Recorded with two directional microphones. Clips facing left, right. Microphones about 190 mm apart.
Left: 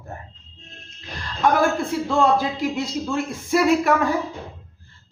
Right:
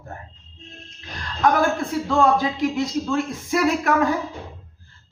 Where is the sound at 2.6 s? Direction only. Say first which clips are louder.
Right 2 dB; centre (ahead or behind).